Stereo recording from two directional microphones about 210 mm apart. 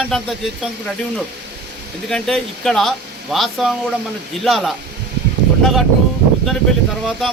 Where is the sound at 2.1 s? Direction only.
5° left (ahead or behind).